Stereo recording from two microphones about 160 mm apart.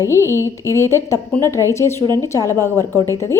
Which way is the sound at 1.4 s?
20° right (ahead or behind).